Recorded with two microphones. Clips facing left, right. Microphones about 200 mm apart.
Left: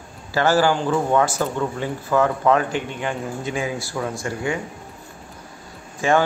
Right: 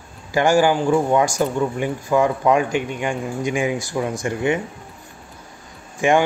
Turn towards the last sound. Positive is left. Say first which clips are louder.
# right 2 dB
turn(degrees=-15)  # may be behind; listen again after turning